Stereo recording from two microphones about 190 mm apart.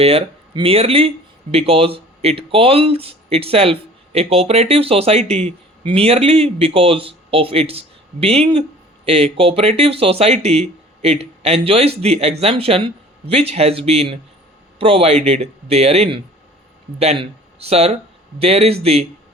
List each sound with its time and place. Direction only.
0.0 s speech: 30° right (ahead or behind)